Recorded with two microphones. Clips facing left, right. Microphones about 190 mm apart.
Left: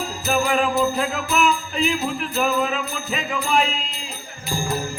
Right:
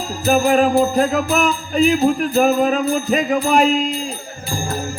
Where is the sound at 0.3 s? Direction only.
45° right (ahead or behind).